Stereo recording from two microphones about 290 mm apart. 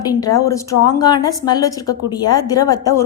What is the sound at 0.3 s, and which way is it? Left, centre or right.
A woman's voice, centre.